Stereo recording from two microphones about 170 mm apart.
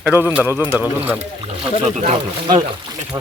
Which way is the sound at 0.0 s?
10° right (ahead or behind).